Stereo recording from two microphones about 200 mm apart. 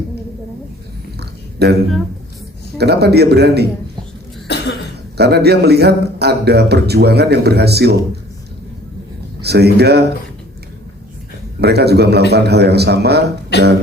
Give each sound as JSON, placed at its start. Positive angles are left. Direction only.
{"t": 1.2, "sound": "a sound", "side_deg": -55}
{"t": 2.7, "sound": "speech", "side_deg": -55}
{"t": 4.4, "sound": "cough", "side_deg": 55}
{"t": 5.1, "sound": "speech", "side_deg": -55}
{"t": 9.4, "sound": "speech", "side_deg": -55}
{"t": 11.6, "sound": "speech", "side_deg": -55}
{"t": 13.5, "sound": "speech", "side_deg": 60}